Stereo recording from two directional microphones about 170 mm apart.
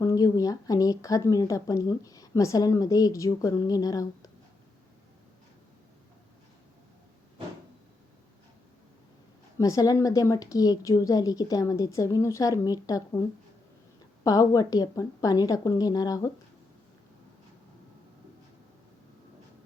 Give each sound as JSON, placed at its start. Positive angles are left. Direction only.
{"t": 0.0, "sound": "speech", "side_deg": 20}
{"t": 9.6, "sound": "speech", "side_deg": 20}
{"t": 14.3, "sound": "speech", "side_deg": 20}